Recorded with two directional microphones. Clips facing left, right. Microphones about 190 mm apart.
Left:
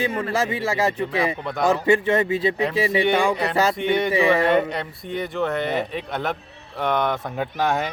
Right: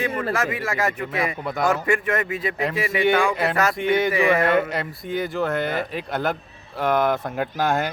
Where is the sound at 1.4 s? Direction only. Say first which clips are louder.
Even; 5° right (ahead or behind).